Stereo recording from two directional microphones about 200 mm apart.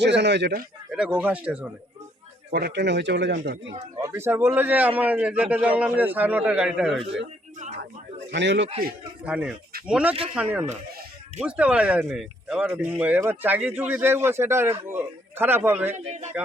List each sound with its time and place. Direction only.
0.0 s speech: 60° right (ahead or behind)
0.9 s speech: 5° right (ahead or behind)
2.5 s speech: 55° right (ahead or behind)
3.8 s speech: 20° right (ahead or behind); by 7.2 s 5° right (ahead or behind)
8.2 s speech: 60° right (ahead or behind)
9.2 s speech: 5° right (ahead or behind)
16.0 s speech: 35° right (ahead or behind)